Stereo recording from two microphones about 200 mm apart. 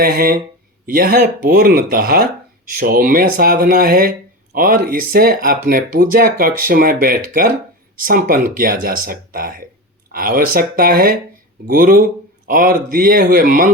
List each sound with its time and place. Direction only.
0.0 s speech: 50° right (ahead or behind)